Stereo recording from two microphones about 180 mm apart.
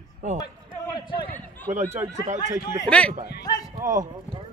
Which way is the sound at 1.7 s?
40° right (ahead or behind).